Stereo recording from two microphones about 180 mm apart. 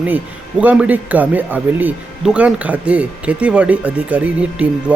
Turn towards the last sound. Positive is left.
turn(degrees=-5)  # may be behind; listen again after turning